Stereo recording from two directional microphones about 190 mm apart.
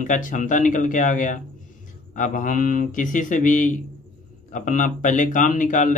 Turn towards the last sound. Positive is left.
turn(degrees=40)  # may be behind; listen again after turning